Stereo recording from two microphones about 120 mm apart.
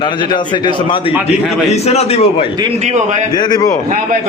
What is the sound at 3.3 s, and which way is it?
Speech, 35° left (ahead or behind).